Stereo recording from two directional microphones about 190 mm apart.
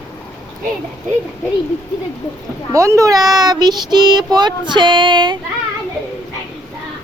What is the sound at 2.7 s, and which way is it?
Speech, 15° right (ahead or behind).